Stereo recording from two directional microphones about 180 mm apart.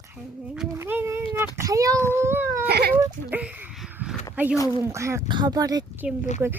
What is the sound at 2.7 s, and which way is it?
Speech, 65° right (ahead or behind).